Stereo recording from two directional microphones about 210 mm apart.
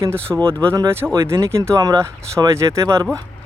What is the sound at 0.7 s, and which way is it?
Speech, 10° right (ahead or behind).